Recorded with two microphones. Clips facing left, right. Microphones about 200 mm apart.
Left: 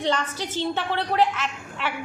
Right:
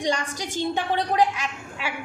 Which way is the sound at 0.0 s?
15° right (ahead or behind).